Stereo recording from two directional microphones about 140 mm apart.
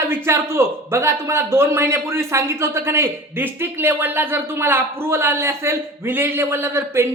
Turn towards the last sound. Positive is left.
turn(degrees=-20)  # may be behind; listen again after turning